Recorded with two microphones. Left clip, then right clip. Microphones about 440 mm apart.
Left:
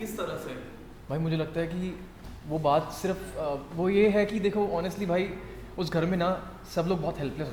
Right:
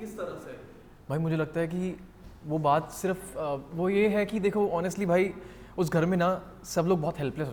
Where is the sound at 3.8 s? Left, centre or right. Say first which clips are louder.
Left 2 dB; centre; by 7.5 s right.